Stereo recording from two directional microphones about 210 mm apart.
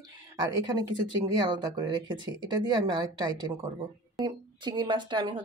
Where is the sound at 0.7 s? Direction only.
20° right (ahead or behind).